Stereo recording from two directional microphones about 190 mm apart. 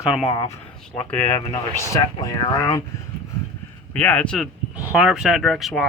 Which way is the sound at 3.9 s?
5° left (ahead or behind).